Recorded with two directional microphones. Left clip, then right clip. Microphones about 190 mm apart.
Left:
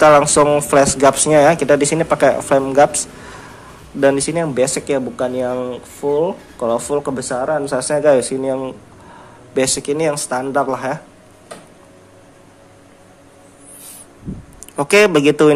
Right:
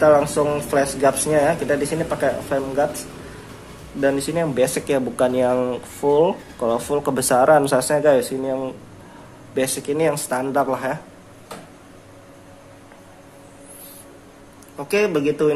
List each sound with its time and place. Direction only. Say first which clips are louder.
0.0 s speech: left 6 dB; 30° left (ahead or behind)
4.0 s speech: left 5 dB; 20° left (ahead or behind); by 6.3 s centre (ahead or behind)
6.6 s speech: left 3 dB; 15° left (ahead or behind); by 7.6 s 5° right (ahead or behind)
7.8 s speech: left 3 dB; 10° left (ahead or behind)
14.8 s a man's voice: left 8 dB; 30° left (ahead or behind)